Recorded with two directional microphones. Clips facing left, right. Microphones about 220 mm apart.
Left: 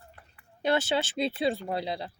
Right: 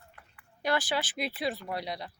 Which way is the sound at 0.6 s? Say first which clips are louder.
Left 4 dB; 25° left (ahead or behind).